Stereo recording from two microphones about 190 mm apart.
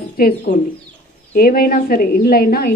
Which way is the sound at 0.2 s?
55° left (ahead or behind).